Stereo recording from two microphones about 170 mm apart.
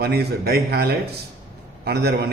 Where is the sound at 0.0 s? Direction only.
70° right (ahead or behind).